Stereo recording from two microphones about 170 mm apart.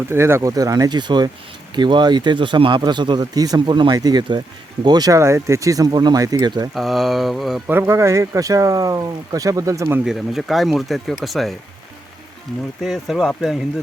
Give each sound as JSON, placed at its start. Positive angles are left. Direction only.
{"t": 0.1, "sound": "speech", "side_deg": -15}
{"t": 6.7, "sound": "speech", "side_deg": 0}
{"t": 7.7, "sound": "speech", "side_deg": -15}
{"t": 10.0, "sound": "speech", "side_deg": 0}
{"t": 12.8, "sound": "speech", "side_deg": 0}